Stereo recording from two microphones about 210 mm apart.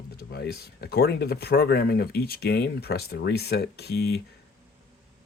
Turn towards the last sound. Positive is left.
turn(degrees=50)  # may be behind; listen again after turning